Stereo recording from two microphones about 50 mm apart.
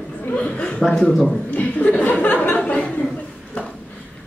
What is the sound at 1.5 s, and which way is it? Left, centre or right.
Chuckle, left.